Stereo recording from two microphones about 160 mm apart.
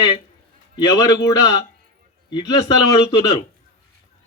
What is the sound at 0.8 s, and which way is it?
Speech, 25° left (ahead or behind).